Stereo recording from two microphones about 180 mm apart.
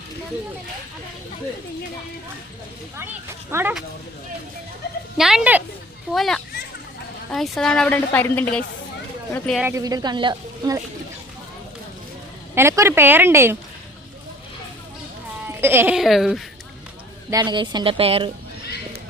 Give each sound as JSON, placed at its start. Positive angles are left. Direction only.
{"t": 3.5, "sound": "speech", "side_deg": -10}
{"t": 5.1, "sound": "a woman's voice", "side_deg": 0}
{"t": 9.6, "sound": "a woman's voice", "side_deg": -15}
{"t": 12.5, "sound": "speech", "side_deg": -15}
{"t": 15.4, "sound": "a sound", "side_deg": -10}
{"t": 16.0, "sound": "a woman's voice", "side_deg": 0}
{"t": 17.3, "sound": "a woman's voice", "side_deg": -25}